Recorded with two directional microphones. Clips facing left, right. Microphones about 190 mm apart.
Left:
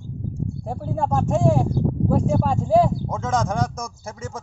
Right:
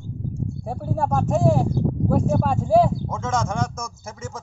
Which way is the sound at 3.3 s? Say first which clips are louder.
Left 2 dB; 35° left (ahead or behind).